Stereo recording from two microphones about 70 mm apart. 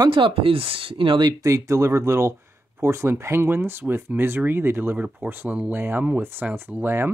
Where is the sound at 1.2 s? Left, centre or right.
Right.